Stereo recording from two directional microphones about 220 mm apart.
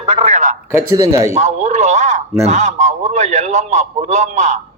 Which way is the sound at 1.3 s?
30° right (ahead or behind).